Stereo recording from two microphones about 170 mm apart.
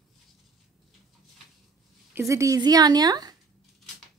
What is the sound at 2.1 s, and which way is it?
A woman's voice, 15° right (ahead or behind).